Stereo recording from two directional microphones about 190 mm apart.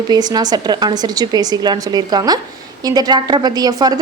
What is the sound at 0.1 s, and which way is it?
A woman's voice, 20° right (ahead or behind).